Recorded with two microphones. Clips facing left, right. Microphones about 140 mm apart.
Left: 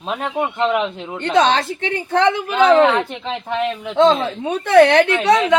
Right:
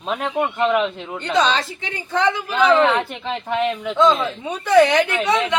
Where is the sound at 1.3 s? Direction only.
55° left (ahead or behind).